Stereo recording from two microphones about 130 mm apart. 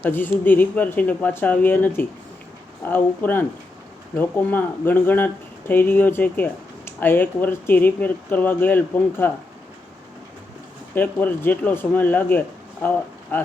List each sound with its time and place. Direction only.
0.0 s speech: 15° left (ahead or behind)
10.9 s speech: 15° left (ahead or behind)